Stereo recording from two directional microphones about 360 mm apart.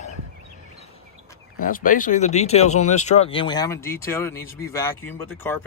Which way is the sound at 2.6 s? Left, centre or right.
Left.